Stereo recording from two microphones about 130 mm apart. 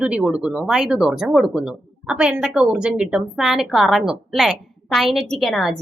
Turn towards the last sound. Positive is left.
turn(degrees=0)  # may be behind; listen again after turning